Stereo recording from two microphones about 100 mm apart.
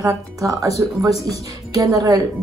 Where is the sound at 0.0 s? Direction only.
35° right (ahead or behind).